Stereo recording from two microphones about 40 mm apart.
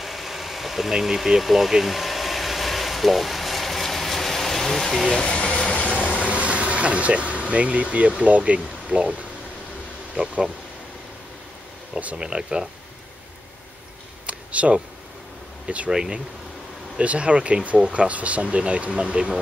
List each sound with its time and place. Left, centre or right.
0.0 s vehicle: centre
5.8 s vehicle: left
6.1 s air conditioning: right
8.2 s speech: right
12.2 s speech: centre
14.2 s a sound: right
15.6 s speech: right
17.0 s speech: right